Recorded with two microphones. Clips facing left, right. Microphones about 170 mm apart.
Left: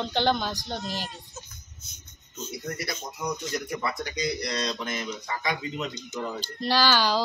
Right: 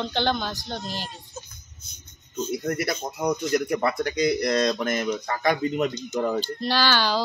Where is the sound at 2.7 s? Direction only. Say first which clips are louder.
Right 7 dB; 55° right (ahead or behind).